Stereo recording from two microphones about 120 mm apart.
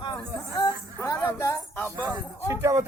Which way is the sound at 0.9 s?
20° left (ahead or behind).